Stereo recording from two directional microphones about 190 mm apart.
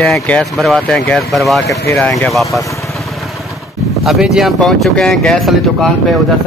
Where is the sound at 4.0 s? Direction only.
Centre (ahead or behind).